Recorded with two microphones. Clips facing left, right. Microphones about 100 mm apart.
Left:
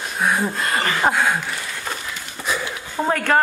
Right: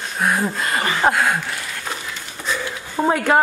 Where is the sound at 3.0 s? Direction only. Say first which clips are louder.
Right 2 dB; 10° right (ahead or behind).